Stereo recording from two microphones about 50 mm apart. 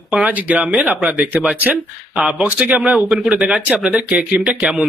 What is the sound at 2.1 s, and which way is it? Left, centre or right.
Speech, centre.